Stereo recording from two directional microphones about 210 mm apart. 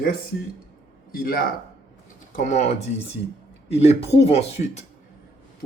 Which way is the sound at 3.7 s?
30° left (ahead or behind).